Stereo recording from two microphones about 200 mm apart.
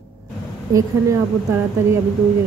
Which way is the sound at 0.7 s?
15° right (ahead or behind).